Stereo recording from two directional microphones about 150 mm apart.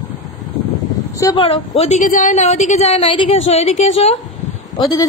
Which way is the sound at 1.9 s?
60° left (ahead or behind).